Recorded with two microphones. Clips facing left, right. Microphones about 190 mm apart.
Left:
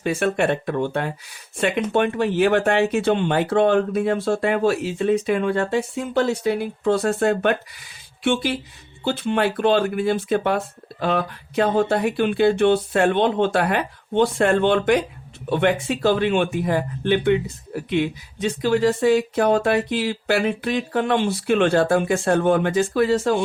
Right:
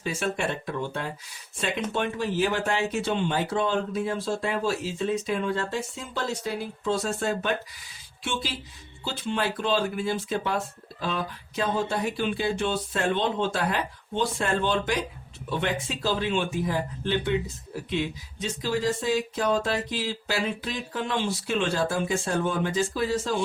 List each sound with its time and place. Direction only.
0.0 s speech: 60° left (ahead or behind)